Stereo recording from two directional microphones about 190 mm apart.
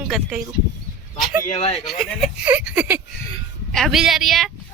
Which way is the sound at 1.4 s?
35° left (ahead or behind).